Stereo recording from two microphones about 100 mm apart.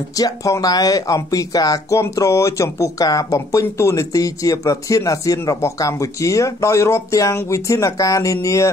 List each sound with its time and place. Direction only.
0.1 s speech: 35° left (ahead or behind)